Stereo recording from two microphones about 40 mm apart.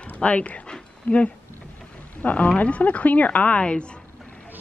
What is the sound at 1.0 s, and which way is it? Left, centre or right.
Speech, left.